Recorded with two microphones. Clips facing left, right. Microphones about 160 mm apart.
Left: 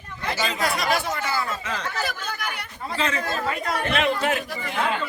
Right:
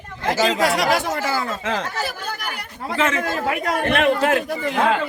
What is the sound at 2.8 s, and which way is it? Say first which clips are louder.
A man's voice: right 5 dB; 85° right.